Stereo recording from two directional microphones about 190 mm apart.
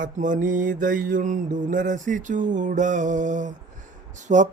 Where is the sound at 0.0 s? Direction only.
40° right (ahead or behind).